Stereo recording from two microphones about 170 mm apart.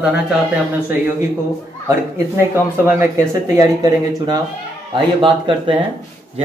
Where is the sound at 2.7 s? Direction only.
15° right (ahead or behind).